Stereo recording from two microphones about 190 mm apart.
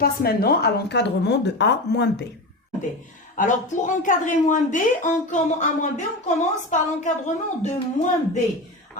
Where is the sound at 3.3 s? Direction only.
40° left (ahead or behind).